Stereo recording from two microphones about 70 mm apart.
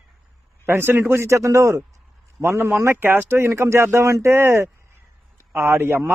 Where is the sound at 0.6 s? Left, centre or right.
Right.